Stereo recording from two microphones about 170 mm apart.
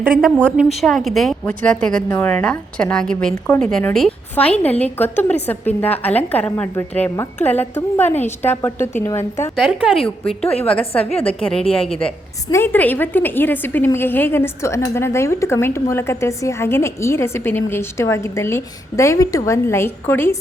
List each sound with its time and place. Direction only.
0.2 s a woman's voice: 5° left (ahead or behind)
9.6 s a woman's voice: 5° right (ahead or behind)
11.0 s a woman's voice: 35° left (ahead or behind)
12.5 s a woman's voice: 15° left (ahead or behind)